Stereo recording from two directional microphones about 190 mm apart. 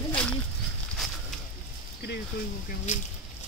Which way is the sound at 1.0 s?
Centre (ahead or behind).